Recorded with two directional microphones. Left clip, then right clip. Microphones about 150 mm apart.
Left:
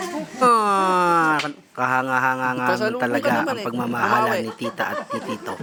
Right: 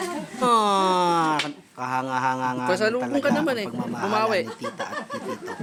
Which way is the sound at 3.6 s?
25° left (ahead or behind).